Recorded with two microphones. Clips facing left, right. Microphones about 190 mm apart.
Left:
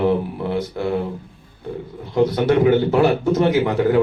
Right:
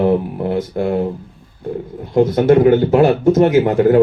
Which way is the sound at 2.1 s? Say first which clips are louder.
Right 5 dB; 50° right (ahead or behind).